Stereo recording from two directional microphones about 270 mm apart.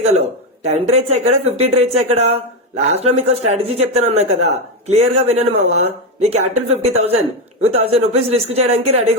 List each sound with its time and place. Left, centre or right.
0.0 s speech: right